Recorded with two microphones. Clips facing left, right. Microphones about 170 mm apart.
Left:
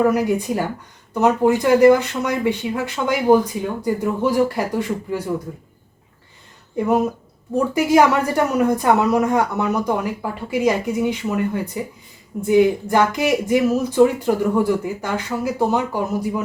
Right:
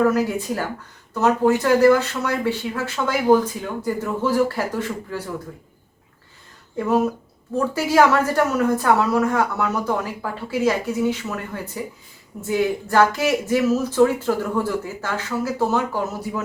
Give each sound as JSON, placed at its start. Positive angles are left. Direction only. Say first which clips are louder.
{"t": 0.1, "sound": "speech", "louder": "left 3 dB", "side_deg": 15}
{"t": 6.7, "sound": "speech", "louder": "left 1 dB", "side_deg": 15}